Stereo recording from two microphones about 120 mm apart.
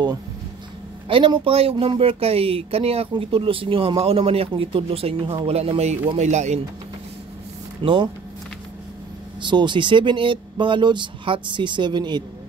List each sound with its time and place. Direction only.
1.0 s speech: 45° right (ahead or behind); by 6.6 s 75° right (ahead or behind)
7.8 s speech: 45° right (ahead or behind)
9.4 s speech: 40° right (ahead or behind)